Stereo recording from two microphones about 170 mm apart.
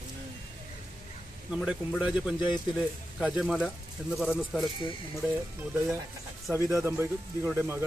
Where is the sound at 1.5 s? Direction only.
Centre (ahead or behind).